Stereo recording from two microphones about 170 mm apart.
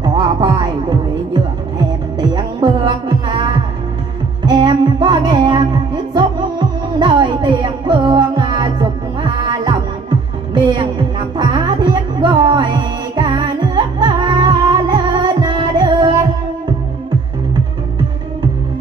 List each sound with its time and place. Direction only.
0.0 s music: 25° right (ahead or behind)